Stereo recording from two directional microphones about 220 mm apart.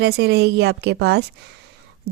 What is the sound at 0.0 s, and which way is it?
A woman's voice, 50° right (ahead or behind).